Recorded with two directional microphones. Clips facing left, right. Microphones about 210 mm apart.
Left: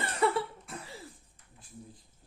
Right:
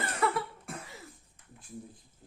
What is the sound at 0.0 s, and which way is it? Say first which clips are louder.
Cough: left 2 dB; 30° left (ahead or behind).